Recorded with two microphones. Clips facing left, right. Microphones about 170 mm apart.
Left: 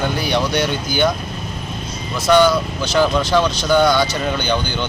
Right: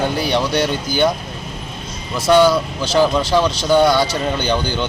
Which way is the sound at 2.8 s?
30° right (ahead or behind).